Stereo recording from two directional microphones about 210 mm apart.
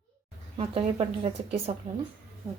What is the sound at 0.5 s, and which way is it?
A woman's voice, 30° right (ahead or behind).